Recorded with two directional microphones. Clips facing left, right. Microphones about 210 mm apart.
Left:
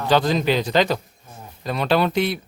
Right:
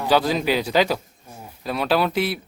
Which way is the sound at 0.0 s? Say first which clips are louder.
Left 1 dB; 10° right (ahead or behind).